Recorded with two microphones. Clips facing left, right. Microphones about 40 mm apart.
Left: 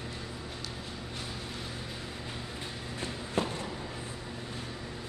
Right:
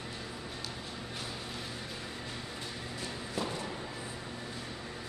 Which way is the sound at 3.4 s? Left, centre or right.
Left.